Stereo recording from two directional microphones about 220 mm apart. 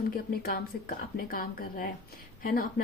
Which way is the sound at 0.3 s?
40° left (ahead or behind).